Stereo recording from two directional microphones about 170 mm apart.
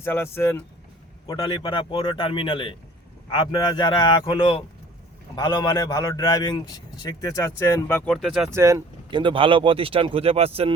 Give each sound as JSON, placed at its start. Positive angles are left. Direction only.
{"t": 0.0, "sound": "speech", "side_deg": 15}
{"t": 1.3, "sound": "a man's voice", "side_deg": 25}
{"t": 8.4, "sound": "speech", "side_deg": -15}